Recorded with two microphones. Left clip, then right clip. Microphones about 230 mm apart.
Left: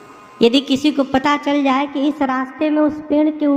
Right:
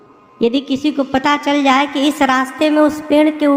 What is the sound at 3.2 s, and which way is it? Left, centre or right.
Speech, right.